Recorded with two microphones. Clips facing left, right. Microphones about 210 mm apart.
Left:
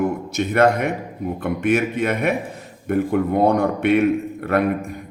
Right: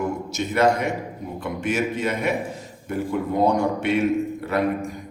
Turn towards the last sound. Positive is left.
turn(degrees=55)  # may be behind; listen again after turning